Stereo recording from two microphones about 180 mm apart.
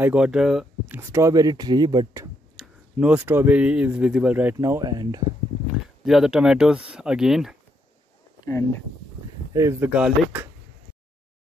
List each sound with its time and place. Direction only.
0.0 s speech: 5° right (ahead or behind); by 2.2 s 20° right (ahead or behind)
2.5 s speech: 5° right (ahead or behind); by 5.2 s 20° right (ahead or behind)
6.0 s speech: centre (ahead or behind)
9.5 s speech: 15° right (ahead or behind)